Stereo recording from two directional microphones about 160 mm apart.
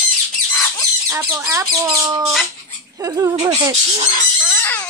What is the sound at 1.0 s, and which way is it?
Speech, 20° right (ahead or behind).